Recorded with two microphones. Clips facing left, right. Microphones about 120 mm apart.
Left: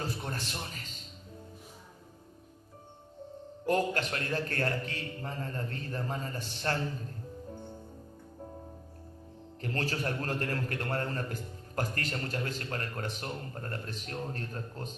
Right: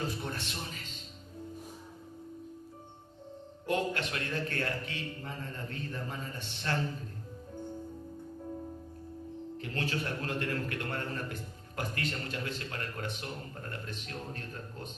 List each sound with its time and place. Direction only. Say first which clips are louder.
0.3 s a man's voice: left 1 dB; 40° left (ahead or behind)
3.7 s speech: left 3 dB; 40° left (ahead or behind)
9.6 s speech: left 2 dB; 40° left (ahead or behind)